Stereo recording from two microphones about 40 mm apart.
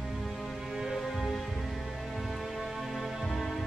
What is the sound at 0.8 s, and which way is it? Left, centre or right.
Music, centre.